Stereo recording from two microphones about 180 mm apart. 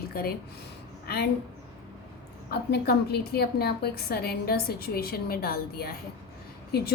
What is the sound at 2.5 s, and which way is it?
A woman's voice, 65° left (ahead or behind).